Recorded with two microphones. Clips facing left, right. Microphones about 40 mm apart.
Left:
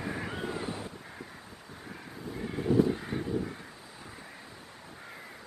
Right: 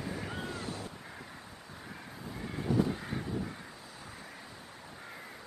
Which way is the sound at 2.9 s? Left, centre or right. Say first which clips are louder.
Left 4 dB; centre.